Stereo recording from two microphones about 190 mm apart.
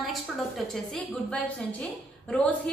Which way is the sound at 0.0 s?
Centre (ahead or behind).